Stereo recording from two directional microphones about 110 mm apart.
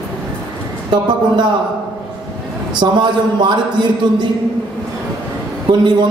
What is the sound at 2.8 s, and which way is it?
A man's voice, 45° right (ahead or behind).